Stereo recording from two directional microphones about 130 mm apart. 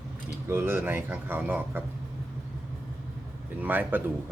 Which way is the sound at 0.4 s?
20° right (ahead or behind).